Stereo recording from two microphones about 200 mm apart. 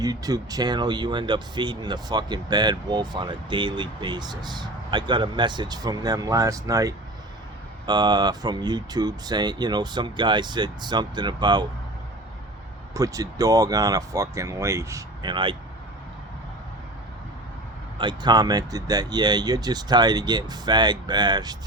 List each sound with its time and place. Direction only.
0.0 s speech: 20° right (ahead or behind)
12.9 s speech: 15° right (ahead or behind)
17.9 s speech: 20° right (ahead or behind)